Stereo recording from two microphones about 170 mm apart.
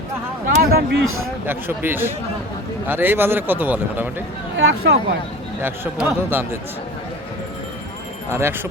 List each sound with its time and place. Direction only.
0.6 s speech: 65° right (ahead or behind)
1.5 s a man's voice: 10° right (ahead or behind)
4.5 s speech: 75° right (ahead or behind)
5.5 s a man's voice: 10° right (ahead or behind)
8.3 s a man's voice: 15° right (ahead or behind)